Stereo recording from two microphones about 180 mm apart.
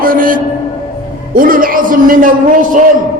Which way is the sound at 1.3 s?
50° right (ahead or behind).